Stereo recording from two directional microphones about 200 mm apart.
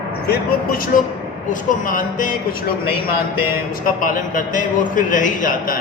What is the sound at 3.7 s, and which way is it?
A man's voice, 45° left (ahead or behind).